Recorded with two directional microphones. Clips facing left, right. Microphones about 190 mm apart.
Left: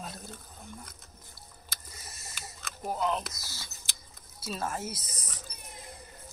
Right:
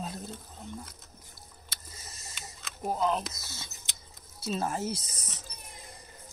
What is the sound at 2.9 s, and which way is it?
Speech, 30° right (ahead or behind).